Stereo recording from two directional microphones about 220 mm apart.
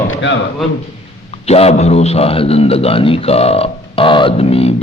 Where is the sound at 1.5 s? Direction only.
30° left (ahead or behind).